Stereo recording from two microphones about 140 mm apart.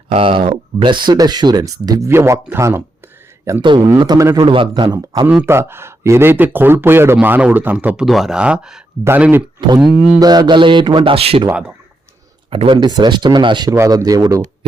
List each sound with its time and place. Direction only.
0.1 s speech: 40° right (ahead or behind); by 2.8 s 20° right (ahead or behind)
3.6 s speech: 30° right (ahead or behind)
5.2 s speech: 10° right (ahead or behind)
9.6 s speech: 30° right (ahead or behind)
9.8 s speech: 10° right (ahead or behind)
10.2 s speech: 30° right (ahead or behind)
11.4 s speech: 10° right (ahead or behind)
12.5 s speech: 40° right (ahead or behind)